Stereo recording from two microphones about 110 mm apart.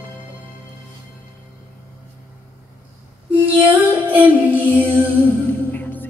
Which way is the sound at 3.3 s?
15° right (ahead or behind).